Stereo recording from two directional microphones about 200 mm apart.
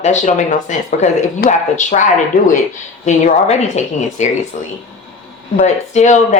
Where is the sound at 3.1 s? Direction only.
35° left (ahead or behind).